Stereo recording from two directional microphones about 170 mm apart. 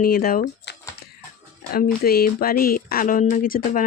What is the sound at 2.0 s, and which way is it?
Speech, 60° left (ahead or behind).